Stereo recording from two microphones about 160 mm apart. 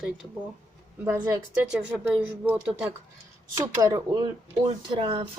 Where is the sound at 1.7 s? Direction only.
10° right (ahead or behind).